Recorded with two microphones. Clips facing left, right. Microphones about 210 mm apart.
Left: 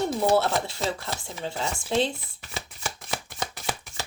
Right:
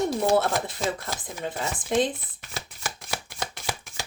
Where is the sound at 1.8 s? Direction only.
15° right (ahead or behind).